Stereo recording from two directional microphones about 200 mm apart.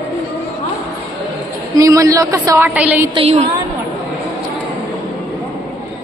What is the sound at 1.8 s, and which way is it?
A woman's voice, 15° right (ahead or behind).